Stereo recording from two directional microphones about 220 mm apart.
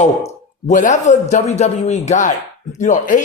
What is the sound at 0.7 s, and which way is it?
Speech, 35° left (ahead or behind).